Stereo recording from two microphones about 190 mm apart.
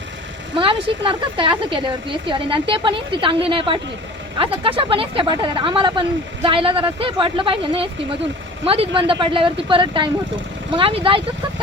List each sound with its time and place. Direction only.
0.5 s speech: 25° right (ahead or behind)